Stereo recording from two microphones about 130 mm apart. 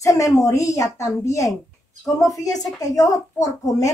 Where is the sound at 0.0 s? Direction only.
25° left (ahead or behind).